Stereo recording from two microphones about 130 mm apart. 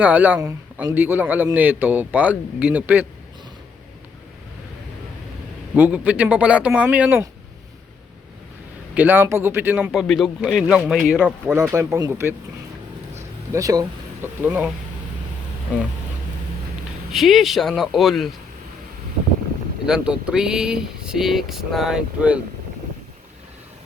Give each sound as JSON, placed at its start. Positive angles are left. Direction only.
{"t": 0.0, "sound": "speech", "side_deg": -15}
{"t": 5.7, "sound": "speech", "side_deg": -10}
{"t": 9.0, "sound": "speech", "side_deg": -15}
{"t": 9.9, "sound": "speech", "side_deg": 0}
{"t": 11.7, "sound": "speech", "side_deg": -25}
{"t": 13.1, "sound": "a sound", "side_deg": -25}
{"t": 14.4, "sound": "speech", "side_deg": -15}
{"t": 17.1, "sound": "speech", "side_deg": 0}
{"t": 19.8, "sound": "speech", "side_deg": -5}